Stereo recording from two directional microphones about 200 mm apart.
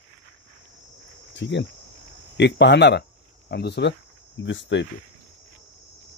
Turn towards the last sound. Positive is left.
turn(degrees=65)  # may be behind; listen again after turning